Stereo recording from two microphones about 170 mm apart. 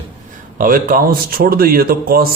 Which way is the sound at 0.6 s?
55° right (ahead or behind).